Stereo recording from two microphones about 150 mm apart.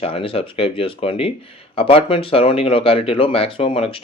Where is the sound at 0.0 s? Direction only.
40° left (ahead or behind).